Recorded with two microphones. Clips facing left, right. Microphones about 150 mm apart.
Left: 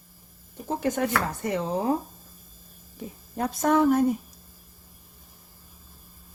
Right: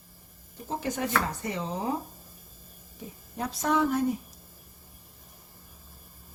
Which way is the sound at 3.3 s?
50° left (ahead or behind).